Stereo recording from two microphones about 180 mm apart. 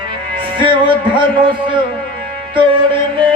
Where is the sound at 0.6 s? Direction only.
25° right (ahead or behind).